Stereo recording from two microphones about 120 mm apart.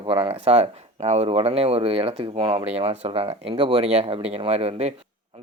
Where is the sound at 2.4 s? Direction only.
35° right (ahead or behind).